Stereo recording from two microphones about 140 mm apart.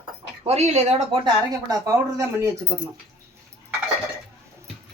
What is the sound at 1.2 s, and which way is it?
Speech, 25° right (ahead or behind).